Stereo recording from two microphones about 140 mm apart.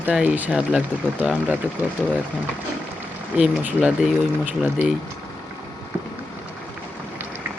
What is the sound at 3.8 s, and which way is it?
Speech, 5° right (ahead or behind).